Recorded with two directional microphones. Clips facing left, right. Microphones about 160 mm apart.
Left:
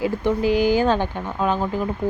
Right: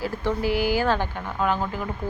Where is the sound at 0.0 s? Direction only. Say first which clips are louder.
Left 5 dB; 15° left (ahead or behind).